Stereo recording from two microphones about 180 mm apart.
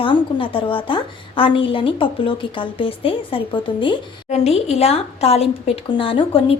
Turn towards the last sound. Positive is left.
turn(degrees=30)  # may be behind; listen again after turning